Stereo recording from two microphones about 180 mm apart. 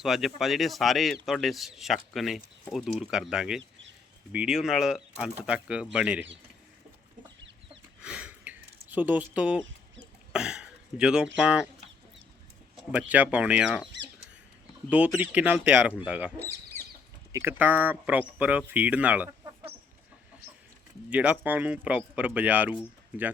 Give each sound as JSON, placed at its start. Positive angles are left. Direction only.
{"t": 0.0, "sound": "speech", "side_deg": 0}
{"t": 3.6, "sound": "a sound", "side_deg": -90}
{"t": 4.3, "sound": "speech", "side_deg": -5}
{"t": 8.0, "sound": "a sound", "side_deg": -5}
{"t": 10.3, "sound": "throat clearing", "side_deg": -5}
{"t": 11.3, "sound": "speech", "side_deg": -5}
{"t": 12.9, "sound": "speech", "side_deg": -10}
{"t": 14.8, "sound": "speech", "side_deg": -10}
{"t": 17.3, "sound": "speech", "side_deg": -10}
{"t": 21.1, "sound": "speech", "side_deg": -10}